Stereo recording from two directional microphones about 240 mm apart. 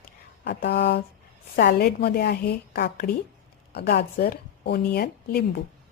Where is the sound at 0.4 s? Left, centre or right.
Left.